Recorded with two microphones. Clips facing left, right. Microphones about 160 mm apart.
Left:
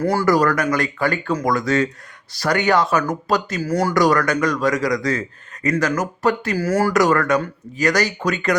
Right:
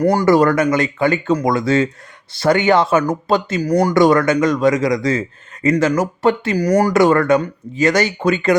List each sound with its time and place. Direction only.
0.0 s a man's voice: 15° right (ahead or behind)
6.9 s a man's voice: 25° right (ahead or behind)